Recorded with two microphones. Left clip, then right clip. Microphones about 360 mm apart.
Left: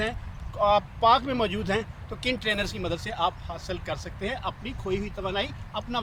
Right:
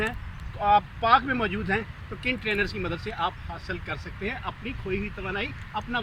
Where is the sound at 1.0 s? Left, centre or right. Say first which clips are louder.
Even; centre.